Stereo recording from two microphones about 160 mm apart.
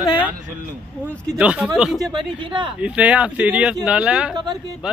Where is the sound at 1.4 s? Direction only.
10° right (ahead or behind).